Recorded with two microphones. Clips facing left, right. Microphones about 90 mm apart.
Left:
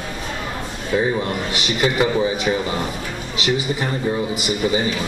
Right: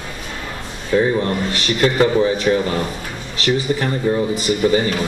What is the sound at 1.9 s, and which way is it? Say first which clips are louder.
Speech: right 3 dB; 10° left (ahead or behind).